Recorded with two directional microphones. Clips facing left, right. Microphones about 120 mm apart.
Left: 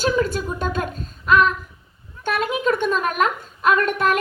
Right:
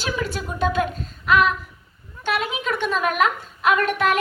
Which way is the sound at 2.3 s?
45° left (ahead or behind).